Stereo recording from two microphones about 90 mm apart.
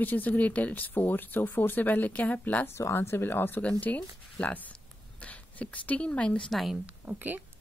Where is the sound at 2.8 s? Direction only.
30° left (ahead or behind); by 6.4 s 15° left (ahead or behind).